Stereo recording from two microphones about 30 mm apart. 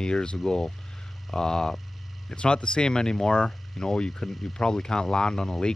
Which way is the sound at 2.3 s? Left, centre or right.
Left.